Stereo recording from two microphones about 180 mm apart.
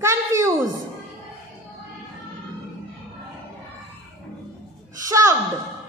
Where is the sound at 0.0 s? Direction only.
15° right (ahead or behind).